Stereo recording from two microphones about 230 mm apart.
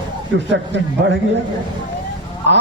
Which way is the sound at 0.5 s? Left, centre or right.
Right.